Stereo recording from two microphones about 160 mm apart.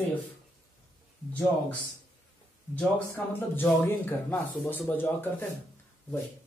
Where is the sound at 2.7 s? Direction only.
10° left (ahead or behind).